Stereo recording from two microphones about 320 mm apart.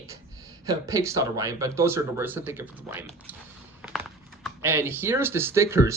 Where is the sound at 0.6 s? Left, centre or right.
Centre.